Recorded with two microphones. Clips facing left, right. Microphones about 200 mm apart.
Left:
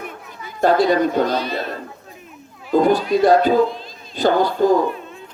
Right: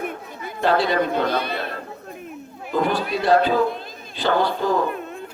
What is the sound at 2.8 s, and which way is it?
Speech, 45° left (ahead or behind).